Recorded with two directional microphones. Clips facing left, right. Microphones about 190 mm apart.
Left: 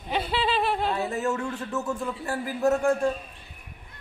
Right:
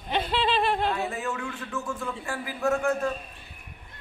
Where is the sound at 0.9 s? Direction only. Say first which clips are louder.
Left 4 dB; 40° left (ahead or behind).